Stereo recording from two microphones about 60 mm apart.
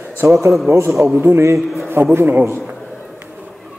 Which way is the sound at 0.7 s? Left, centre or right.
Right.